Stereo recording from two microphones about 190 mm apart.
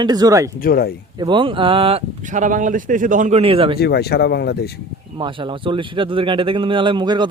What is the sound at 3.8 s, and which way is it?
Speech, 55° left (ahead or behind).